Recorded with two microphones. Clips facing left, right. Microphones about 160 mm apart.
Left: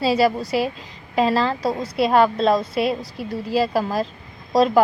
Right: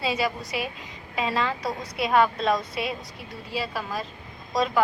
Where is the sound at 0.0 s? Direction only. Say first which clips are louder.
Left 9 dB; 35° left (ahead or behind).